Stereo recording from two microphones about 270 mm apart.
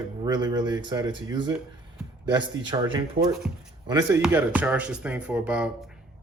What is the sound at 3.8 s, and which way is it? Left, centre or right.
Speech, centre.